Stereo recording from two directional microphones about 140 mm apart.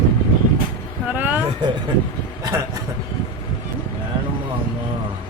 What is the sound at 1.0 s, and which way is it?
Vehicle, 10° right (ahead or behind).